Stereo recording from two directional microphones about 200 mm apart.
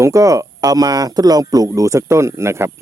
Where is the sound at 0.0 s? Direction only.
15° right (ahead or behind).